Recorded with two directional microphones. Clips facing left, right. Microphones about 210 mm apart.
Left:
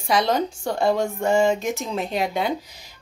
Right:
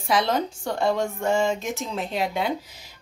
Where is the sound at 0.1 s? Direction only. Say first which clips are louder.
Left 2 dB; centre (ahead or behind).